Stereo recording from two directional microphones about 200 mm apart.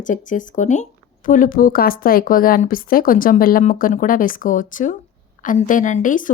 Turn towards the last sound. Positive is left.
turn(degrees=40)  # may be behind; listen again after turning